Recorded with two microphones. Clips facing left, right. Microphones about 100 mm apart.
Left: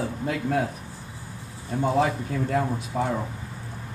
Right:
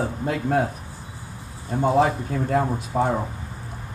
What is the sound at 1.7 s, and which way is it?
A man's voice, 25° right (ahead or behind).